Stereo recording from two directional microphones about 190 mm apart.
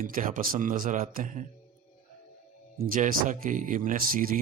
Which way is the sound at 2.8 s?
45° right (ahead or behind).